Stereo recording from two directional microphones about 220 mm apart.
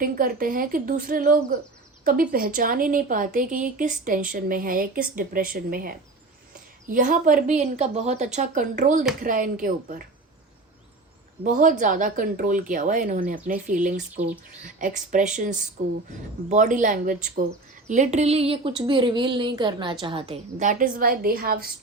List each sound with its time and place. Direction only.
0.0 s a woman's voice: 40° right (ahead or behind)
11.4 s a woman's voice: 35° right (ahead or behind)